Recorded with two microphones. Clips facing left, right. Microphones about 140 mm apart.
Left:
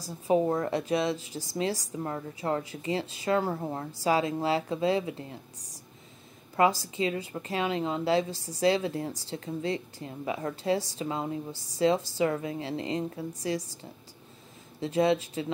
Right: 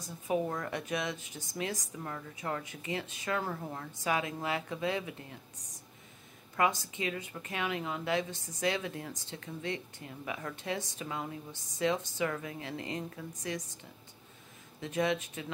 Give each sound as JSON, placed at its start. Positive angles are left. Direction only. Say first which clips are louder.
{"t": 0.0, "sound": "a woman's voice", "louder": "left 7 dB", "side_deg": 30}
{"t": 14.8, "sound": "a woman's voice", "louder": "left 7 dB", "side_deg": 30}